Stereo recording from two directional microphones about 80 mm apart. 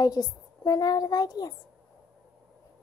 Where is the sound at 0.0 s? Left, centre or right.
Left.